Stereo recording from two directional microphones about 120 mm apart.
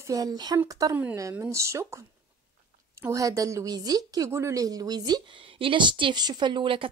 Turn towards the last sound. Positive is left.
turn(degrees=-45)  # may be behind; listen again after turning